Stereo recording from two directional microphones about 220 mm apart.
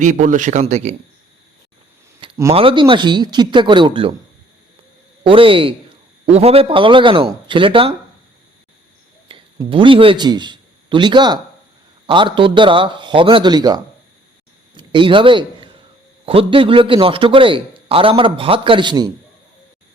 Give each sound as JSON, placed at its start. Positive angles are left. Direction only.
{"t": 0.0, "sound": "speech", "side_deg": -35}
{"t": 2.2, "sound": "speech", "side_deg": -25}
{"t": 5.2, "sound": "speech", "side_deg": -25}
{"t": 9.3, "sound": "a man's voice", "side_deg": -20}